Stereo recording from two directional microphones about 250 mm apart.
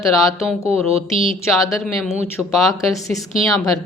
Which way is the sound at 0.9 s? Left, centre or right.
Right.